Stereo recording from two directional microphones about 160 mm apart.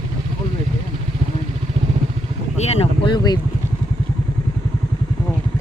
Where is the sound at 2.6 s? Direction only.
40° left (ahead or behind).